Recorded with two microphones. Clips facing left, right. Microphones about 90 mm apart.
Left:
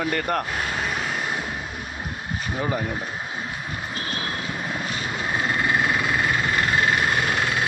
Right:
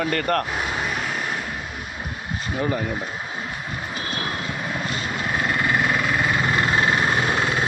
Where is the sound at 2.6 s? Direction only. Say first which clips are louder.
Right 2 dB; 10° left (ahead or behind).